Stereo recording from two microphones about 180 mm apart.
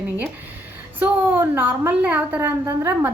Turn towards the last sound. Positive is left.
turn(degrees=-10)  # may be behind; listen again after turning